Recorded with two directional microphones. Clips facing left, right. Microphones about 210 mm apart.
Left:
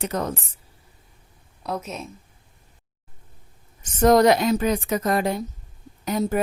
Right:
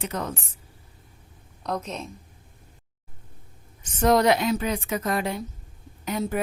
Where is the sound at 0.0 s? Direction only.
40° left (ahead or behind).